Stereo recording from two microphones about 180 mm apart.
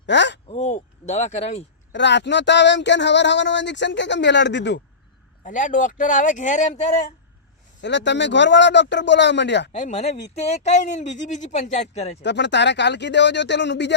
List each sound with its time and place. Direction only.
0.0 s speech: 80° left
0.4 s speech: 35° left (ahead or behind)
1.9 s speech: 75° left (ahead or behind)
5.4 s speech: 45° left (ahead or behind)
7.8 s speech: 80° left
9.7 s speech: 40° left (ahead or behind)
12.2 s speech: 75° left (ahead or behind)